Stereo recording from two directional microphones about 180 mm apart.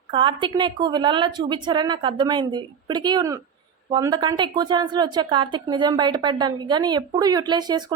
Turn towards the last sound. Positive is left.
turn(degrees=-25)  # may be behind; listen again after turning